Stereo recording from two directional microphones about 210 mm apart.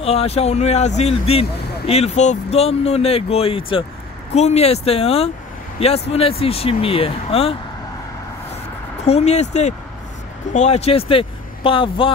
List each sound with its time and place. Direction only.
0.0 s speech: 30° left (ahead or behind)
9.0 s speech: 30° left (ahead or behind)